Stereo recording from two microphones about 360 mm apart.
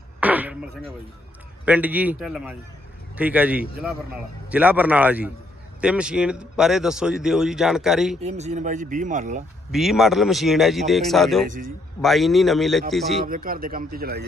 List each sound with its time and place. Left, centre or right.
0.2 s a sound: centre
1.6 s a man's voice: centre
8.2 s speech: centre
9.7 s a man's voice: centre
11.4 s speech: right
12.0 s a man's voice: centre
13.2 s speech: right